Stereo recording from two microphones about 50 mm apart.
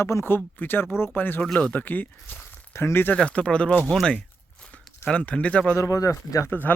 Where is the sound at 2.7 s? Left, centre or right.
Left.